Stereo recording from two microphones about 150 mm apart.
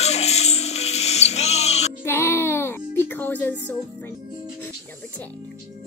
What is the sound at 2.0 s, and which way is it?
Music, 15° left (ahead or behind).